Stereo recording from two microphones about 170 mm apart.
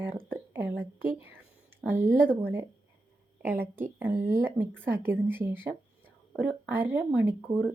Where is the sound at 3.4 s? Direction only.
10° right (ahead or behind).